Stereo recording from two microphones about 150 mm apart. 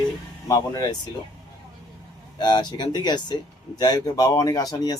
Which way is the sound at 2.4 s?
30° left (ahead or behind).